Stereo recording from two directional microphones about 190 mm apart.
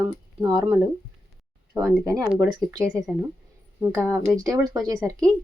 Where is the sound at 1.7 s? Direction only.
15° right (ahead or behind).